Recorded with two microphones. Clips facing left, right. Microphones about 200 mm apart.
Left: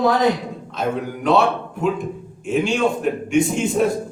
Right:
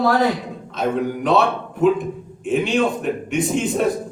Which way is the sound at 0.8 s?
Centre (ahead or behind).